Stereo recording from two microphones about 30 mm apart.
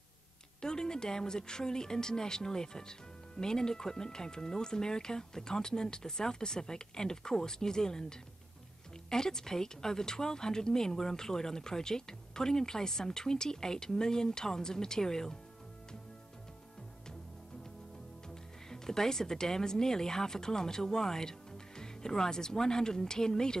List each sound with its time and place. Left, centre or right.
0.6 s speech: left
18.3 s speech: centre